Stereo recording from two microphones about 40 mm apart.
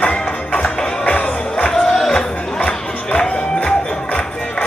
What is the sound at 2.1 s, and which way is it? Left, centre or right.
Chatter, left.